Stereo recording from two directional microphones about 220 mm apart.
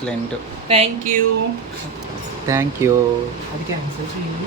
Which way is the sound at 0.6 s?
25° right (ahead or behind).